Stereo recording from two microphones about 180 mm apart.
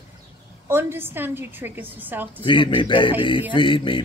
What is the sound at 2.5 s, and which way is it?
Speech, 25° left (ahead or behind).